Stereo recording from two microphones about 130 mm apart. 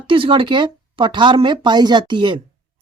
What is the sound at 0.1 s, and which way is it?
Speech, 40° right (ahead or behind).